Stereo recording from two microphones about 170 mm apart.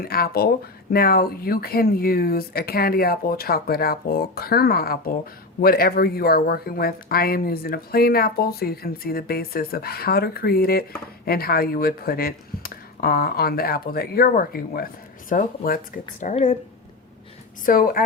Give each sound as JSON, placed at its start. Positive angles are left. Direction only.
{"t": 0.0, "sound": "speech", "side_deg": 65}
{"t": 16.3, "sound": "speech", "side_deg": 45}
{"t": 17.7, "sound": "speech", "side_deg": 55}